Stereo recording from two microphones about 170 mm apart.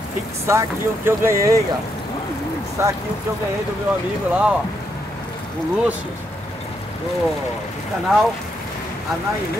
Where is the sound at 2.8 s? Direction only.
15° right (ahead or behind).